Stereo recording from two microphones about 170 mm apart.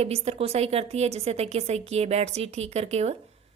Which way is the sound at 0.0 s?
35° right (ahead or behind).